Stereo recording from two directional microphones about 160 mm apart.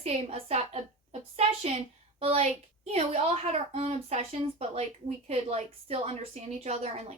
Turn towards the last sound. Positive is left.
turn(degrees=-45)  # may be behind; listen again after turning